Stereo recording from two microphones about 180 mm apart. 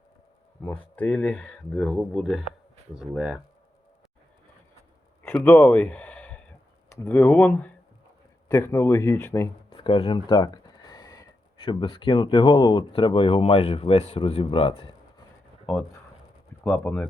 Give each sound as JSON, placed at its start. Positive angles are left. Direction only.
{"t": 0.6, "sound": "speech", "side_deg": 5}
{"t": 5.2, "sound": "speech", "side_deg": 10}
{"t": 9.7, "sound": "speech", "side_deg": 30}
{"t": 16.6, "sound": "speech", "side_deg": 5}